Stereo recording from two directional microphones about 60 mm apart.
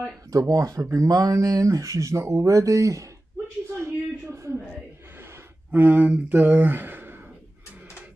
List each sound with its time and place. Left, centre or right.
0.3 s speech: right
3.7 s a sound: right
5.7 s speech: right